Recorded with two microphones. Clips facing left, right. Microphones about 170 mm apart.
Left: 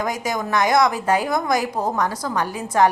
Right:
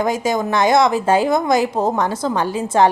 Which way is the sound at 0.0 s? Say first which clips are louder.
Right 6 dB; 25° right (ahead or behind).